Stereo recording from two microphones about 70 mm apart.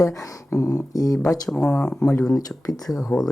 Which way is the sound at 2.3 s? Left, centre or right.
Left.